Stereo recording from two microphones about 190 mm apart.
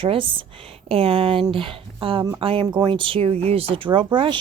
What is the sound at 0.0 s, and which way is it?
Speech, 30° right (ahead or behind).